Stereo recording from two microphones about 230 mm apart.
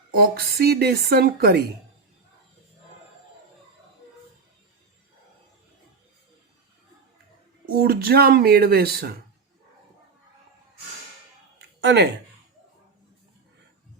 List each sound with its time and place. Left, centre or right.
0.2 s speech: right
7.8 s speech: right
11.8 s speech: right